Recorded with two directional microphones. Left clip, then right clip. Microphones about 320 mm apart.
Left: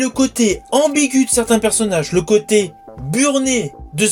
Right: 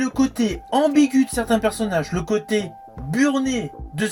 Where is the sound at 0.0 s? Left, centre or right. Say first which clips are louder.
Left 5 dB; right.